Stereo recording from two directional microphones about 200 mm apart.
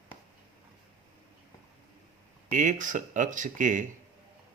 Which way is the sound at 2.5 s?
40° right (ahead or behind).